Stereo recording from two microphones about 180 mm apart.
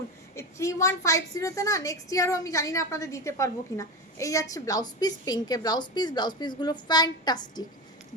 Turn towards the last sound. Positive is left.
turn(degrees=25)  # may be behind; listen again after turning